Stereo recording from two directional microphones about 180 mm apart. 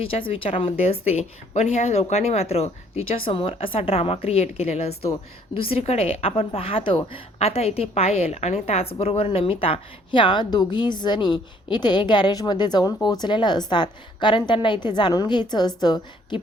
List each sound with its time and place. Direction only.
0.0 s a woman's voice: 30° left (ahead or behind)